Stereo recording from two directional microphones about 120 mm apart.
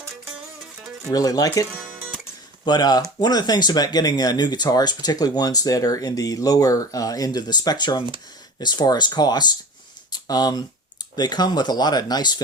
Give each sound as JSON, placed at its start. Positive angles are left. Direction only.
{"t": 1.1, "sound": "speech", "side_deg": 30}
{"t": 2.6, "sound": "speech", "side_deg": 35}
{"t": 10.1, "sound": "a sound", "side_deg": 35}
{"t": 11.2, "sound": "speech", "side_deg": 35}